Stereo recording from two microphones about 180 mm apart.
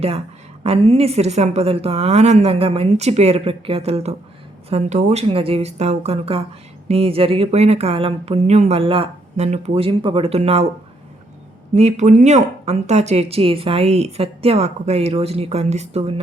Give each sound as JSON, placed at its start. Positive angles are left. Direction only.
{"t": 0.6, "sound": "speech", "side_deg": -35}
{"t": 11.7, "sound": "speech", "side_deg": -40}